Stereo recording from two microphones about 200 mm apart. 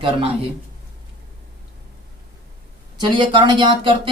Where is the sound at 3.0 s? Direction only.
25° right (ahead or behind).